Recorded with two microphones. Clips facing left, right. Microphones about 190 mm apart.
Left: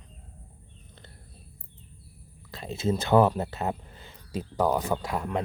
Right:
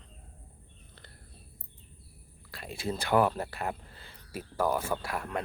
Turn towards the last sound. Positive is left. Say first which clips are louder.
# left 4 dB
turn(degrees=20)  # may be behind; listen again after turning